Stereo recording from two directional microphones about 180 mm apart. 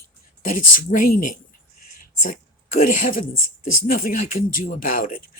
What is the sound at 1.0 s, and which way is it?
Speech, 45° left (ahead or behind).